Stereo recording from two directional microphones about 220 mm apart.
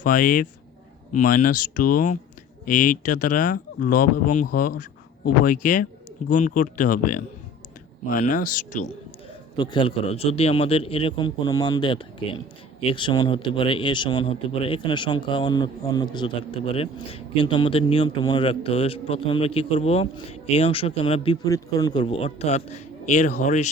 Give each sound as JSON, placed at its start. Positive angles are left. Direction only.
{"t": 0.0, "sound": "speech", "side_deg": 40}
{"t": 9.6, "sound": "a man's voice", "side_deg": 20}